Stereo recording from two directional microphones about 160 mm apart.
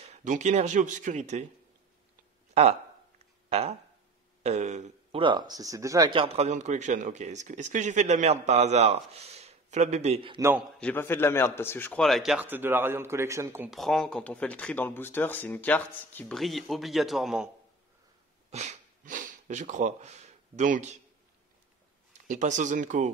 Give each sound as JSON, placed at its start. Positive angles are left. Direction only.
{"t": 0.0, "sound": "speech", "side_deg": -45}
{"t": 2.5, "sound": "speech", "side_deg": -40}
{"t": 5.2, "sound": "speech", "side_deg": -25}
{"t": 10.8, "sound": "a man's voice", "side_deg": 10}
{"t": 12.0, "sound": "speech", "side_deg": 0}
{"t": 12.4, "sound": "speech", "side_deg": -15}
{"t": 13.7, "sound": "speech", "side_deg": 0}
{"t": 18.5, "sound": "speech", "side_deg": -45}
{"t": 22.3, "sound": "speech", "side_deg": -50}